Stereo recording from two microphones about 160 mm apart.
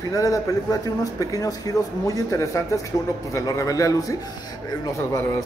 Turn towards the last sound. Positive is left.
turn(degrees=20)  # may be behind; listen again after turning